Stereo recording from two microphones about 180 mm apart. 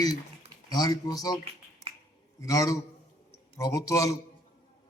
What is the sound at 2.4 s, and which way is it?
Speech, 20° left (ahead or behind).